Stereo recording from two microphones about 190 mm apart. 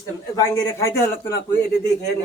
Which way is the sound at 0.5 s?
15° left (ahead or behind).